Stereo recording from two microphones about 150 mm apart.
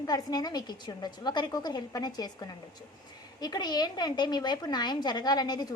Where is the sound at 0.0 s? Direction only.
25° left (ahead or behind).